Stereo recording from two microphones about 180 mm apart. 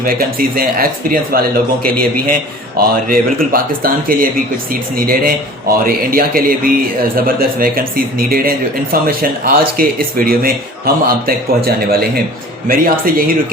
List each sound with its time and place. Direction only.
0.0 s speech: 55° right (ahead or behind)